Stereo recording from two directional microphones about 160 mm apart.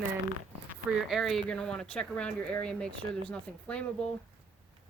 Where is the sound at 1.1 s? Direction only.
Centre (ahead or behind).